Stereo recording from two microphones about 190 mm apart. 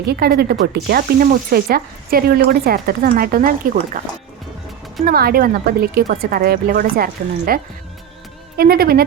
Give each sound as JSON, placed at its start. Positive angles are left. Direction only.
{"t": 0.0, "sound": "speech", "side_deg": -55}
{"t": 3.9, "sound": "speech", "side_deg": -40}
{"t": 5.0, "sound": "speech", "side_deg": -55}